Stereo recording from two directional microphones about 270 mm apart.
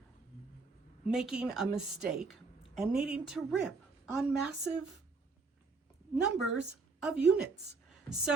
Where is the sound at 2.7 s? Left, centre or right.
Centre.